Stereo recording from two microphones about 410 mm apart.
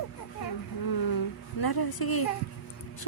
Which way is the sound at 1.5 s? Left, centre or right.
Left.